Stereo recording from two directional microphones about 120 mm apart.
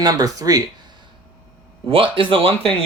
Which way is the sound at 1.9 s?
50° right (ahead or behind).